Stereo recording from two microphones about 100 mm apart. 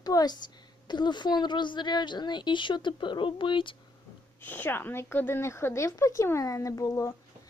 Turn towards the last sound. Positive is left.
turn(degrees=30)  # may be behind; listen again after turning